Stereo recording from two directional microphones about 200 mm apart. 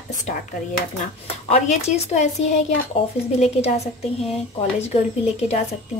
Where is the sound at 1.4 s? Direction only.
30° left (ahead or behind).